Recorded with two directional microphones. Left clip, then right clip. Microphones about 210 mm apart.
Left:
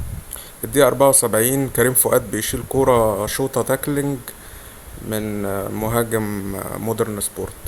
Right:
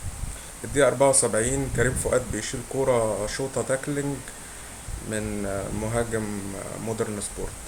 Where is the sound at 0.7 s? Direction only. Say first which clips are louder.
Left 6 dB; 45° left (ahead or behind).